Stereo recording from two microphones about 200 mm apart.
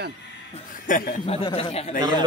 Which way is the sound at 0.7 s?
40° left (ahead or behind).